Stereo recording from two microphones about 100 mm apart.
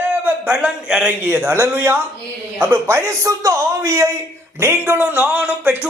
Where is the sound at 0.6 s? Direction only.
10° right (ahead or behind).